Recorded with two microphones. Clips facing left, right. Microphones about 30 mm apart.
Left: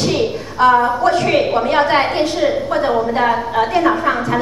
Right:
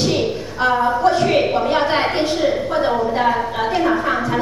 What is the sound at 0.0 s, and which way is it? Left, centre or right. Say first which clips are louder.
A woman's voice: left 1 dB; centre.